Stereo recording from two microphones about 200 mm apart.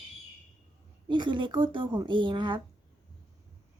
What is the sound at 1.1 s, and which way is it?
A woman's voice, 25° right (ahead or behind).